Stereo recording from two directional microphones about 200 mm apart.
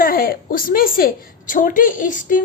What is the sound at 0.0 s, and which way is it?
A woman's voice, 45° left (ahead or behind).